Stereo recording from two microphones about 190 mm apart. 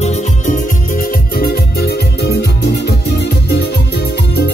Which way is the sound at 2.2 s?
60° left (ahead or behind).